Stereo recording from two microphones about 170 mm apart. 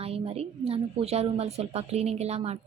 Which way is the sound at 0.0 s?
35° right (ahead or behind).